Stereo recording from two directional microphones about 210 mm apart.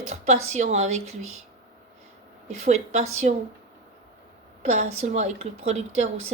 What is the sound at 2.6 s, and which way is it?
Speech, 30° right (ahead or behind).